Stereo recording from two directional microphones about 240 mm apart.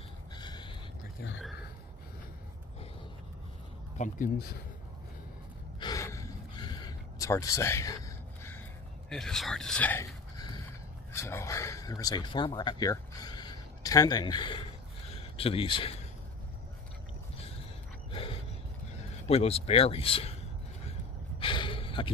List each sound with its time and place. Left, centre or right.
0.4 s a sound: centre
4.0 s speech: left
5.8 s gasp: centre
9.1 s speech: centre; by 16.0 s left
18.1 s a sound: left
19.2 s speech: left
21.4 s gasp: left